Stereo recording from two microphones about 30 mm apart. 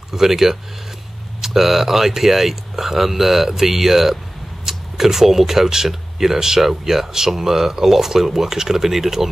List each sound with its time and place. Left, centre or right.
0.1 s speech: centre